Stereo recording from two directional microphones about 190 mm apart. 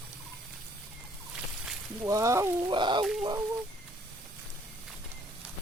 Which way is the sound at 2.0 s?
15° right (ahead or behind).